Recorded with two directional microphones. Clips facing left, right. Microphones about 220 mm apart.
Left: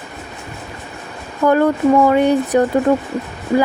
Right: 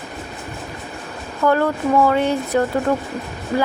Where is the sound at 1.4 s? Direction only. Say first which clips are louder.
Left 5 dB; 15° left (ahead or behind).